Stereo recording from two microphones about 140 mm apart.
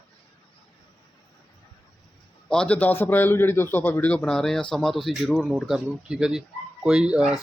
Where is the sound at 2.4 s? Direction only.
5° left (ahead or behind).